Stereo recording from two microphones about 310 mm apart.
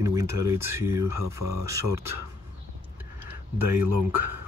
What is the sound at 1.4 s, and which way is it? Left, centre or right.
Speech, right.